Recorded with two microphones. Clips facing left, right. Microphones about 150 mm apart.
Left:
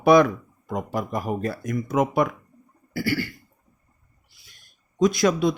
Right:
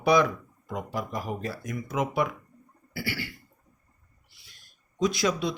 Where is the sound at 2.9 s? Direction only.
45° left (ahead or behind).